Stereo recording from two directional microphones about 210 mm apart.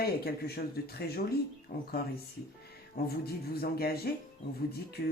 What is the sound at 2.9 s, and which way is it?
Speech, 45° left (ahead or behind).